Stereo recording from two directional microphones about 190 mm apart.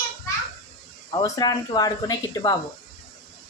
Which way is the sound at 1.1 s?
20° left (ahead or behind).